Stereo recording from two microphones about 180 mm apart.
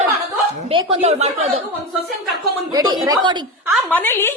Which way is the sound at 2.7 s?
20° right (ahead or behind).